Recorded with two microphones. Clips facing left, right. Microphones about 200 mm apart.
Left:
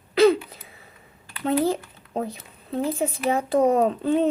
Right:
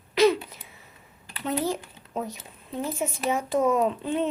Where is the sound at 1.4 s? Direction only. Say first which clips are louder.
Left 5 dB; 35° left (ahead or behind).